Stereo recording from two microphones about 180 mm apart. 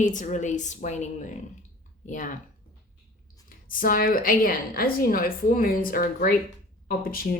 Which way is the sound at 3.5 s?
50° left (ahead or behind).